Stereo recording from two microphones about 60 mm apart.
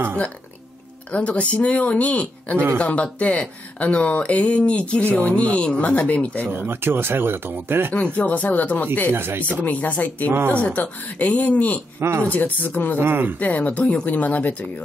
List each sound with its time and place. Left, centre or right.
1.1 s speech: left
6.5 s speech: right
7.9 s speech: left
9.1 s speech: right
9.6 s speech: left
10.3 s speech: right
10.6 s speech: left
12.0 s speech: right
12.3 s speech: left
13.0 s speech: right
13.4 s speech: left